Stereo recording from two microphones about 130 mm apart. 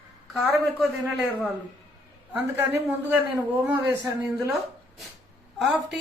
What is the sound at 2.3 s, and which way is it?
Speech, 15° right (ahead or behind).